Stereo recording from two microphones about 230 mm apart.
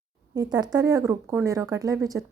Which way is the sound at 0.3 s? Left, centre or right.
Centre.